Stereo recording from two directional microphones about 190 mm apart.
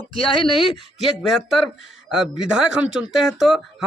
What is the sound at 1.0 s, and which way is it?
Speech, centre (ahead or behind).